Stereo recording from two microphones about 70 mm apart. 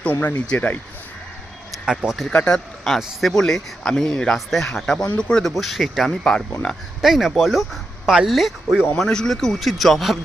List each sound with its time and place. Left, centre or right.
0.0 s speech: left
1.7 s a sound: centre
2.3 s speech: centre
2.8 s speech: centre
6.1 s speech: centre
7.0 s speech: centre
9.0 s speech: centre